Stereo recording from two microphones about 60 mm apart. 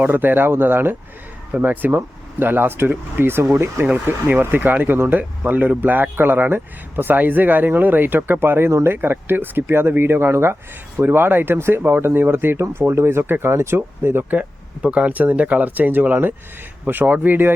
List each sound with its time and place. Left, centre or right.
0.0 s speech: right
3.8 s speech: right
11.8 s speech: right
14.3 s speech: right